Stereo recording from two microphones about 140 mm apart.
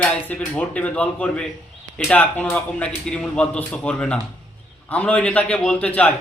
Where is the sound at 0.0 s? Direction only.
10° left (ahead or behind).